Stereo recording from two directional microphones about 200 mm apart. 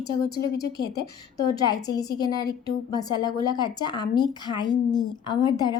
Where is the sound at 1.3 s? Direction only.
20° left (ahead or behind).